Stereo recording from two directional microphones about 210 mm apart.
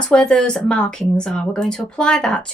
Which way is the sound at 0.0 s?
5° left (ahead or behind).